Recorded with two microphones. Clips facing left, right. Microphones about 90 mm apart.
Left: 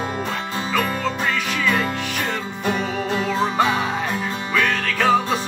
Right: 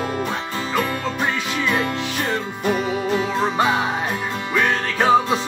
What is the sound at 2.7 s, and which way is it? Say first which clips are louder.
Music: right 2 dB; 5° right (ahead or behind).